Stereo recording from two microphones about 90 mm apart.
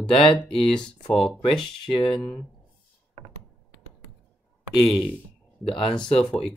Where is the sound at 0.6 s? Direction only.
5° left (ahead or behind).